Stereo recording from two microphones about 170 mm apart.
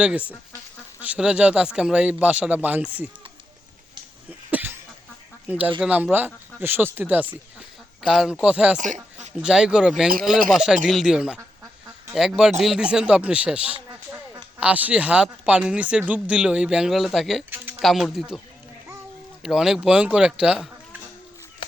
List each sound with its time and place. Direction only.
0.0 s speech: 5° right (ahead or behind)
4.3 s cough: 10° right (ahead or behind)
5.5 s speech: 10° right (ahead or behind)
8.8 s a sound: 45° right (ahead or behind)
9.4 s speech: 5° right (ahead or behind)
19.4 s speech: 5° right (ahead or behind)